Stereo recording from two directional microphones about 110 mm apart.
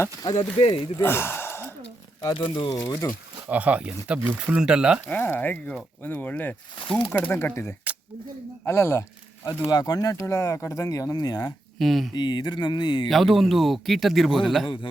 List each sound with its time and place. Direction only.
0.2 s speech: 35° left (ahead or behind)
0.9 s gasp: 20° left (ahead or behind)
2.3 s speech: 50° left (ahead or behind)
2.6 s speech: 30° left (ahead or behind)
3.5 s speech: 15° right (ahead or behind)
5.0 s speech: 20° left (ahead or behind)
9.6 s speech: 35° left (ahead or behind)
11.8 s speech: centre (ahead or behind)
12.1 s speech: 40° left (ahead or behind)
13.1 s speech: centre (ahead or behind)